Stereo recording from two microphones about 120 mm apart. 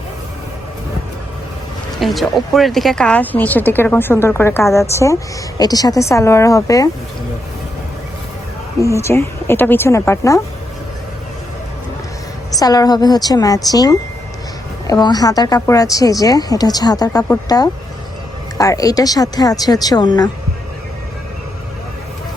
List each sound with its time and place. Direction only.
2.0 s speech: centre (ahead or behind); by 6.9 s 30° left (ahead or behind)
8.8 s speech: 25° left (ahead or behind)
12.5 s a woman's voice: 30° left (ahead or behind)